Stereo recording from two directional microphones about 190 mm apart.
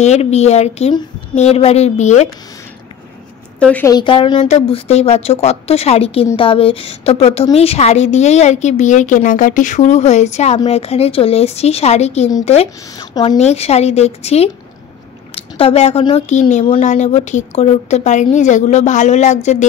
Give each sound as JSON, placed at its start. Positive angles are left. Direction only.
{"t": 0.0, "sound": "a woman's voice", "side_deg": 35}
{"t": 3.5, "sound": "a woman's voice", "side_deg": 5}
{"t": 3.9, "sound": "a woman's voice", "side_deg": 25}
{"t": 12.9, "sound": "a woman's voice", "side_deg": 20}
{"t": 13.4, "sound": "a woman's voice", "side_deg": 35}